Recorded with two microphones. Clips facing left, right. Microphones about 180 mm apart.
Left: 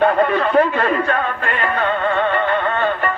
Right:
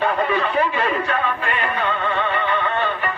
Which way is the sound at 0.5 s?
55° left (ahead or behind).